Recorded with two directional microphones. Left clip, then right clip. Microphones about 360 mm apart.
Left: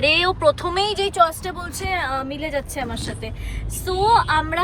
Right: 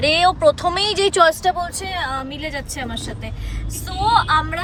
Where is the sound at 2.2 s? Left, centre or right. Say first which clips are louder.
Even; left.